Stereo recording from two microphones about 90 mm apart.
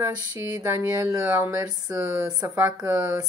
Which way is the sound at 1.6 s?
35° right (ahead or behind).